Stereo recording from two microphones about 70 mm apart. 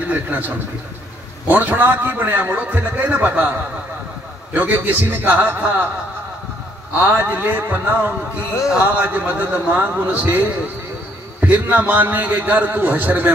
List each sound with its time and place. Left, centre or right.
0.1 s a man's voice: right
1.5 s a man's voice: right
7.0 s a man's voice: right
11.4 s a man's voice: right